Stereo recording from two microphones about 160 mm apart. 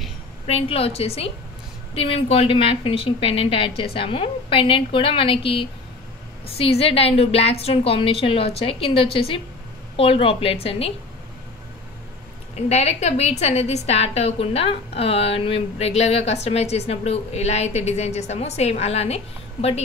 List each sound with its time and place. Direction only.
0.5 s a woman's voice: 40° left (ahead or behind)
12.5 s a woman's voice: 45° left (ahead or behind)